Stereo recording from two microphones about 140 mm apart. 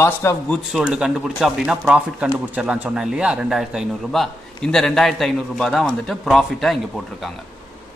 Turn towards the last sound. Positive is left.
turn(degrees=0)  # may be behind; listen again after turning